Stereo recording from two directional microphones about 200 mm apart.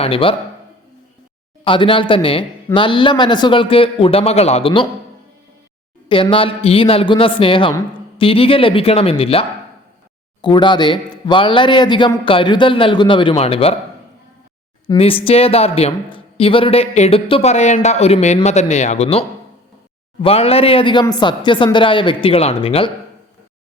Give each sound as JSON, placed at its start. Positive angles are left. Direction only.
{"t": 0.0, "sound": "a woman's voice", "side_deg": 25}
{"t": 1.6, "sound": "a woman's voice", "side_deg": 25}
{"t": 6.1, "sound": "a woman's voice", "side_deg": 25}
{"t": 14.8, "sound": "a woman's voice", "side_deg": 30}
{"t": 20.2, "sound": "a woman's voice", "side_deg": 30}